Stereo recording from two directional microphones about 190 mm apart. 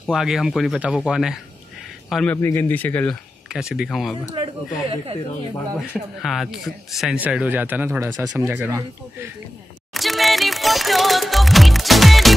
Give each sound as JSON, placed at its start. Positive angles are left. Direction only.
{"t": 0.0, "sound": "speech", "side_deg": 0}
{"t": 3.4, "sound": "speech", "side_deg": -5}
{"t": 4.4, "sound": "speech", "side_deg": -30}
{"t": 5.8, "sound": "speech", "side_deg": 0}
{"t": 9.9, "sound": "music", "side_deg": 0}